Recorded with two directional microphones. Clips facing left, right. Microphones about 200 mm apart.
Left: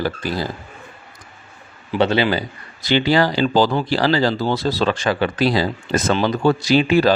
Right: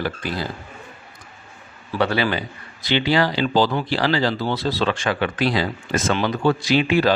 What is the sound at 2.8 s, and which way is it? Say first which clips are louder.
Speech: left 3 dB; 40° left (ahead or behind).